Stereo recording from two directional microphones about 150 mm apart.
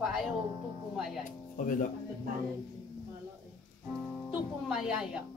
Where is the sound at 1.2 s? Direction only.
65° left (ahead or behind).